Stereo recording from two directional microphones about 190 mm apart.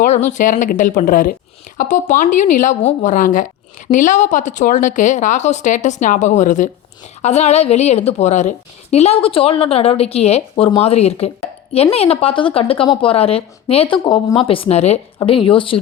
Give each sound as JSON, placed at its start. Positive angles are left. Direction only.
{"t": 0.0, "sound": "a woman's voice", "side_deg": 40}